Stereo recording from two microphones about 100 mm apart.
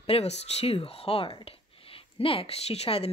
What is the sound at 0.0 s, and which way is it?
Speech, 85° left.